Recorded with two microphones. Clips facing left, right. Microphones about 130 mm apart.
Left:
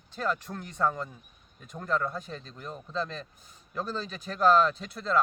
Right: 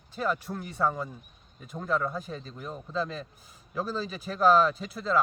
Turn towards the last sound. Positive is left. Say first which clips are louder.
# right 1 dB
turn(degrees=-5)  # may be behind; listen again after turning